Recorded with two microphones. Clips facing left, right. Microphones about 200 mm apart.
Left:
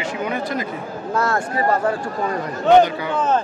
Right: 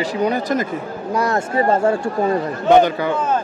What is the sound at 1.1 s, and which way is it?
Speech, 20° right (ahead or behind).